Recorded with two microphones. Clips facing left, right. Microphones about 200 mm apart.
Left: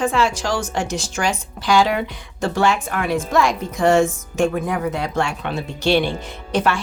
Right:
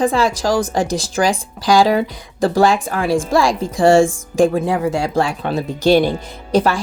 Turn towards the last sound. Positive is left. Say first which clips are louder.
# right 4 dB
turn(degrees=-35)  # may be behind; listen again after turning